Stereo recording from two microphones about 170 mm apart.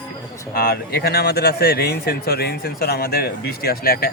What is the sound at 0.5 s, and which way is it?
Speech, 70° left (ahead or behind).